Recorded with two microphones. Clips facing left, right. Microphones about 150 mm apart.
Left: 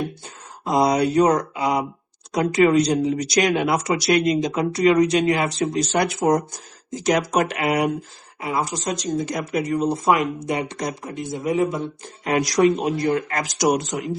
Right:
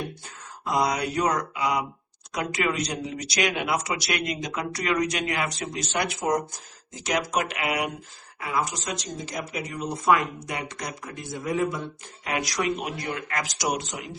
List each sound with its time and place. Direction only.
0.6 s speech: 30° left (ahead or behind)
8.4 s speech: 25° left (ahead or behind)
9.2 s speech: 50° left (ahead or behind)
9.7 s speech: 30° left (ahead or behind)
12.2 s speech: 35° left (ahead or behind)